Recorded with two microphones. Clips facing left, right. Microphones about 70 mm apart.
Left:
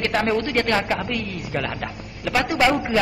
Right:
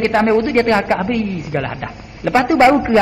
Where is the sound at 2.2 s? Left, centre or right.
Right.